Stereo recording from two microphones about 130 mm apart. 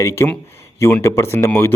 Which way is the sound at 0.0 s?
20° left (ahead or behind).